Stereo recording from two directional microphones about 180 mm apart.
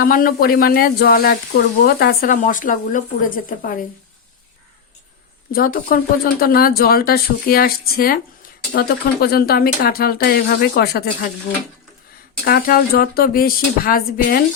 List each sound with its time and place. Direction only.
0.0 s speech: 50° left (ahead or behind)
5.5 s speech: 55° left (ahead or behind)
12.5 s speech: 55° left (ahead or behind)